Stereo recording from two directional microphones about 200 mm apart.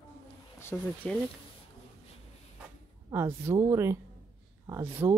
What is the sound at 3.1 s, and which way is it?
A woman's voice, 15° right (ahead or behind).